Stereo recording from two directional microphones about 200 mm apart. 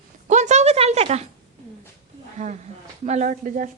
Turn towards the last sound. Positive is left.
turn(degrees=-40)  # may be behind; listen again after turning